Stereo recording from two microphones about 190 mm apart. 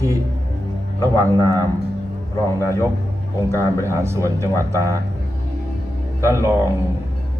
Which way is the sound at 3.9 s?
15° right (ahead or behind).